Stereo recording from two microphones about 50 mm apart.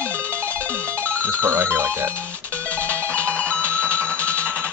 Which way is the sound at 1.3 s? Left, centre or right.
Right.